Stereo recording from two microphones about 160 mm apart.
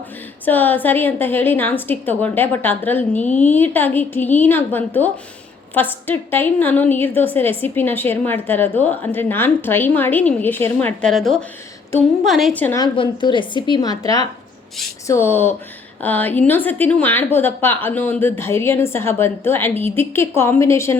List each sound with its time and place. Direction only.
0.4 s a woman's voice: 10° left (ahead or behind)
12.5 s a woman's voice: 10° left (ahead or behind)
12.8 s a woman's voice: 30° left (ahead or behind)